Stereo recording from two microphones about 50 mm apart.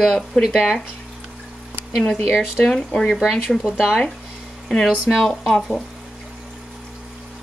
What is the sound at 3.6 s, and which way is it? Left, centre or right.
Speech, centre.